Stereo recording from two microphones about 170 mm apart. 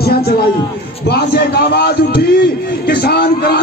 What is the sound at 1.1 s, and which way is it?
A man's voice, 70° left (ahead or behind).